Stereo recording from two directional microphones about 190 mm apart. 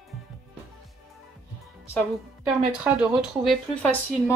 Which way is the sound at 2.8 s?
5° right (ahead or behind).